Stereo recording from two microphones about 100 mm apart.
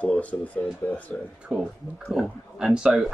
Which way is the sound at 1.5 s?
5° right (ahead or behind).